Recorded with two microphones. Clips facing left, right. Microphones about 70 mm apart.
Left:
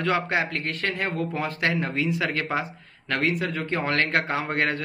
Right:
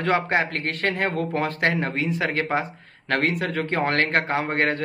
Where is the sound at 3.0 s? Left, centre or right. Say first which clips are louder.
Right 2 dB; right.